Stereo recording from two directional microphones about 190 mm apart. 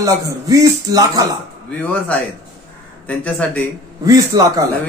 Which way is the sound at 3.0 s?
5° left (ahead or behind).